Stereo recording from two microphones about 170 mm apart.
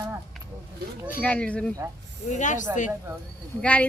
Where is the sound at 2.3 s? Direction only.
45° left (ahead or behind).